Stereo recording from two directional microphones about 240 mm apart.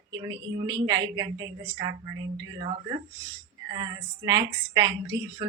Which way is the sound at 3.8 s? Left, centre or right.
Centre.